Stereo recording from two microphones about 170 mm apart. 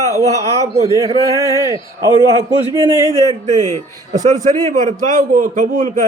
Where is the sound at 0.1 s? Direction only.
20° right (ahead or behind).